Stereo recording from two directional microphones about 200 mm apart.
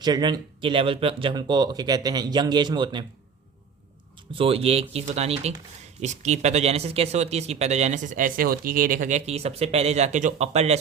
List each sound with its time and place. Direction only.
0.0 s speech: 20° right (ahead or behind)
4.4 s speech: 30° right (ahead or behind)